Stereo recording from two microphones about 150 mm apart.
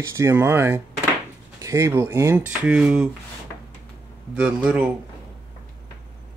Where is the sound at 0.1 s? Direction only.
20° right (ahead or behind).